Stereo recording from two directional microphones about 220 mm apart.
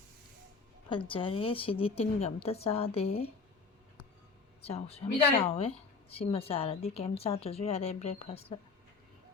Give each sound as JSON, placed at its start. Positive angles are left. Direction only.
{"t": 0.9, "sound": "a woman's voice", "side_deg": 25}
{"t": 4.6, "sound": "a woman's voice", "side_deg": 25}